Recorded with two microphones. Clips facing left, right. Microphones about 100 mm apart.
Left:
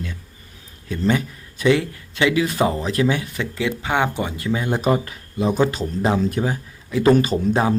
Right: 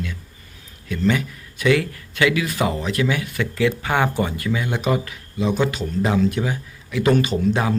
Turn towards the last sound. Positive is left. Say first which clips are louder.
# left 1 dB
turn(degrees=35)  # may be behind; listen again after turning